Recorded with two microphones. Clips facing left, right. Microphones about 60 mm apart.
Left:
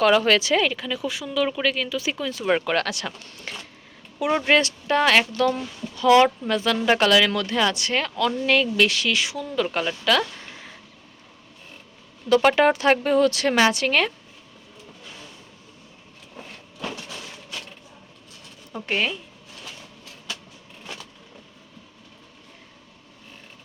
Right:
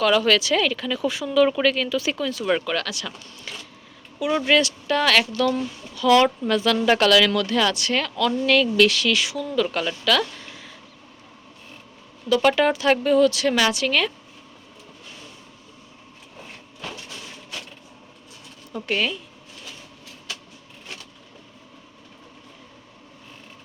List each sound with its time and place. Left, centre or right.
0.0 s speech: left
2.4 s speech: left
2.7 s speech: left
3.3 s a sound: left
4.4 s speech: left
12.5 s speech: left
18.7 s speech: left